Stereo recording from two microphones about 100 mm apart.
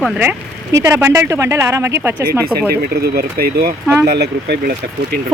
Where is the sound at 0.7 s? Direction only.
30° right (ahead or behind).